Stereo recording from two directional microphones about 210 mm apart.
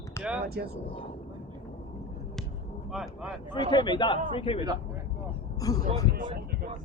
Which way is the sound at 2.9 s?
Centre (ahead or behind).